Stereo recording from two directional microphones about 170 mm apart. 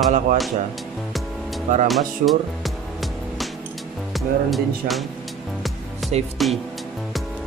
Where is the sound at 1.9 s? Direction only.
Centre (ahead or behind).